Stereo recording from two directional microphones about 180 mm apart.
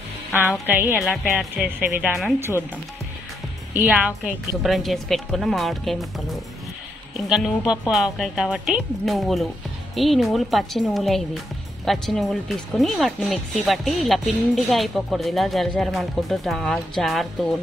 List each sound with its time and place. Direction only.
0.4 s a woman's voice: 10° right (ahead or behind)
0.9 s speech: centre (ahead or behind)
1.8 s a woman's voice: 10° right (ahead or behind)
3.7 s a woman's voice: 10° right (ahead or behind)